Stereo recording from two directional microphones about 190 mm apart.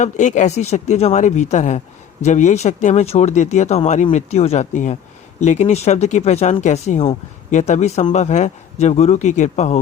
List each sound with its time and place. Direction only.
0.0 s speech: 40° left (ahead or behind)